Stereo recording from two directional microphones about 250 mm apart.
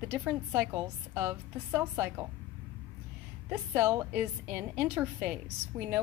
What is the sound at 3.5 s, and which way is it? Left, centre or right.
A woman's voice, centre.